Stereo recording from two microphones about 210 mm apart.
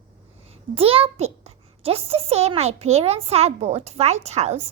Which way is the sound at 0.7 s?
25° right (ahead or behind).